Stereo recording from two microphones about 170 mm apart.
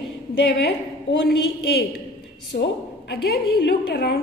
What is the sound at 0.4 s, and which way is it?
A woman's voice, 85° left.